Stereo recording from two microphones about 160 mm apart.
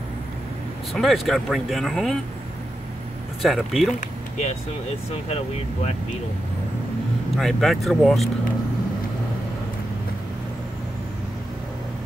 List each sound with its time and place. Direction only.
0.9 s speech: centre (ahead or behind)
3.4 s speech: centre (ahead or behind)
5.3 s speech: 40° left (ahead or behind)
7.3 s speech: centre (ahead or behind)